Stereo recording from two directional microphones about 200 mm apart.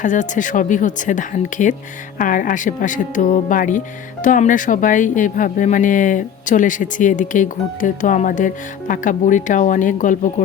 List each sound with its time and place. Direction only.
0.0 s speech: 40° left (ahead or behind)